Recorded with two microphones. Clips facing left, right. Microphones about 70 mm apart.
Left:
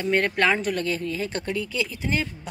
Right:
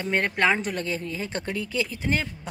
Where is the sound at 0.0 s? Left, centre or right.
Centre.